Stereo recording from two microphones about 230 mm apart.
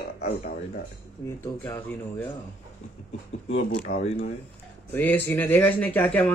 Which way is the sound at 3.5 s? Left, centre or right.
Left.